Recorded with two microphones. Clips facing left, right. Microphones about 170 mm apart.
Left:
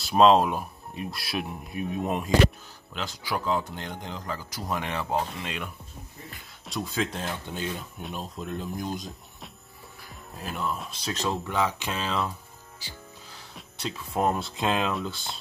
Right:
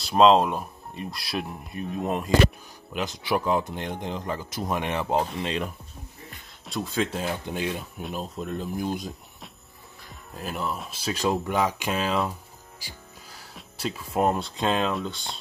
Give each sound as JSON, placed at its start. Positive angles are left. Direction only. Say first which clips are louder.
{"t": 0.0, "sound": "speech", "louder": "right 1 dB", "side_deg": 0}
{"t": 2.9, "sound": "speech", "louder": "right 5 dB", "side_deg": -20}
{"t": 5.1, "sound": "speech", "louder": "right 4 dB", "side_deg": -35}
{"t": 6.6, "sound": "speech", "louder": "right 2 dB", "side_deg": 0}
{"t": 13.6, "sound": "speech", "louder": "right 3 dB", "side_deg": -5}